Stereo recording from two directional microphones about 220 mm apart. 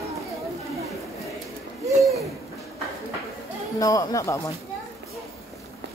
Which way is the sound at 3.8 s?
15° left (ahead or behind).